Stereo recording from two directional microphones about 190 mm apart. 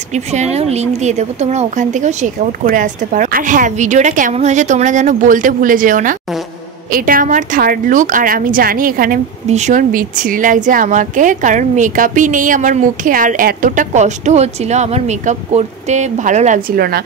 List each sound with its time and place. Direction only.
0.1 s a woman's voice: 35° right (ahead or behind); by 17.0 s 50° right (ahead or behind)